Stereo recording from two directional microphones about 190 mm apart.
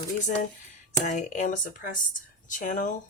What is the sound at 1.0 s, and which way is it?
Speech, 40° left (ahead or behind).